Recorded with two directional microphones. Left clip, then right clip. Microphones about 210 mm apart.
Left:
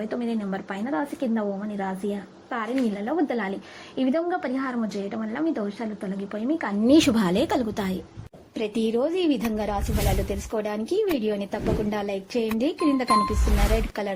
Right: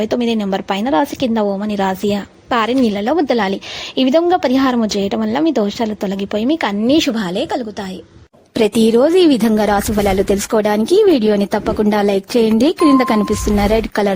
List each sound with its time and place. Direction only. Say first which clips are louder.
0.0 s a woman's voice: right 12 dB; 40° right (ahead or behind)
6.8 s speech: right 1 dB; 5° right (ahead or behind)
8.5 s speech: right 13 dB; 60° right (ahead or behind)